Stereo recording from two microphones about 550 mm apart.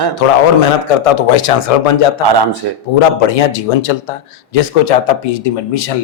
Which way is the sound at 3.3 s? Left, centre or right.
Left.